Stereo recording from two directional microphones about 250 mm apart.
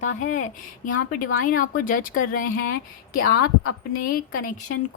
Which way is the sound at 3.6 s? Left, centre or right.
Left.